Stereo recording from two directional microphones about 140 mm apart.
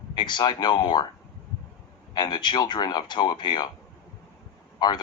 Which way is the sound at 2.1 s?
30° left (ahead or behind).